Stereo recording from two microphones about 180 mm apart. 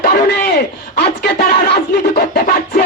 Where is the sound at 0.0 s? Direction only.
65° left (ahead or behind).